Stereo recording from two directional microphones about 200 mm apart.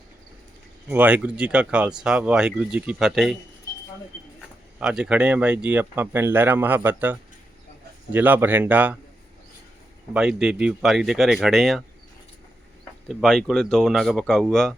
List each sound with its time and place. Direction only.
0.9 s speech: 10° right (ahead or behind)
4.8 s speech: 5° right (ahead or behind)
10.2 s speech: 5° right (ahead or behind)
13.1 s speech: centre (ahead or behind)